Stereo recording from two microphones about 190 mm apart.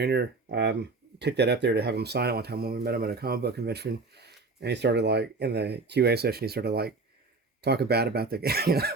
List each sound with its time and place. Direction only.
0.0 s speech: 60° right (ahead or behind)